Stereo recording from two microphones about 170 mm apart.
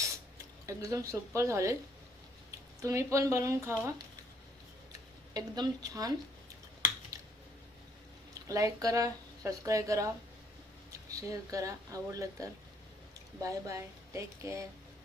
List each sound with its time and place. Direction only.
0.6 s speech: 20° right (ahead or behind)
2.8 s speech: 15° right (ahead or behind)
5.3 s speech: 20° right (ahead or behind)
8.4 s speech: 20° right (ahead or behind)
11.2 s speech: 20° right (ahead or behind)